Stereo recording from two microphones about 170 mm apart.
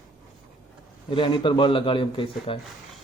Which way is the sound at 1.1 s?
30° left (ahead or behind).